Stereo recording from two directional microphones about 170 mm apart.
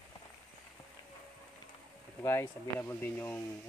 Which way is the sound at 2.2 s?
15° left (ahead or behind).